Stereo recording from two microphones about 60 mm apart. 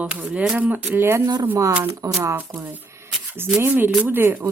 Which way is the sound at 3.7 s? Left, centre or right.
Right.